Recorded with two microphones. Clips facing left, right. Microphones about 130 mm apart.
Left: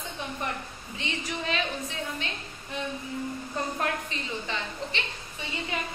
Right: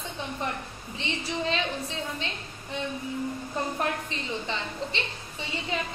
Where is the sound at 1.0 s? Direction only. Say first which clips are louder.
Right 3 dB; 25° right (ahead or behind).